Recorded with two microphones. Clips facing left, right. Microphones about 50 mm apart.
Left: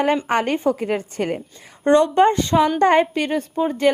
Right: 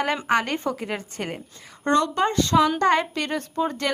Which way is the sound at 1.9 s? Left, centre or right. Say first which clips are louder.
Left 7 dB; left.